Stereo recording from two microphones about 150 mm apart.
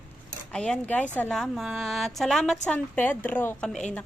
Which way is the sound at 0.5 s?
5° left (ahead or behind).